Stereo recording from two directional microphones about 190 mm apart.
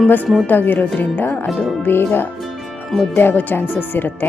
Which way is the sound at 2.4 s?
Centre (ahead or behind).